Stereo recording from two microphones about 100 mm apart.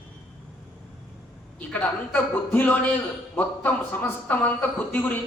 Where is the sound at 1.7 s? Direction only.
20° left (ahead or behind).